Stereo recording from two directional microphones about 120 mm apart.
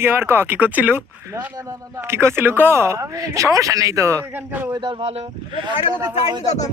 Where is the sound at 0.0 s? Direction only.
20° right (ahead or behind).